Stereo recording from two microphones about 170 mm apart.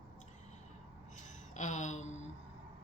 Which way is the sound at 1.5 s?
45° left (ahead or behind).